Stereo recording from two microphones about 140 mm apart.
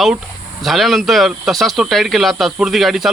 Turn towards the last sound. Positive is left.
turn(degrees=0)  # may be behind; listen again after turning